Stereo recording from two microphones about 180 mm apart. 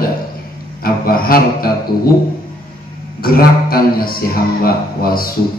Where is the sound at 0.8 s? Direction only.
55° left (ahead or behind).